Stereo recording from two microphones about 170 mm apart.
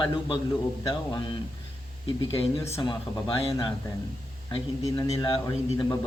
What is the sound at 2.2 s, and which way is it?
Speech, 20° left (ahead or behind).